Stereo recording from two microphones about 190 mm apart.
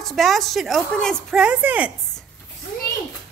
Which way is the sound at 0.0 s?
Centre (ahead or behind).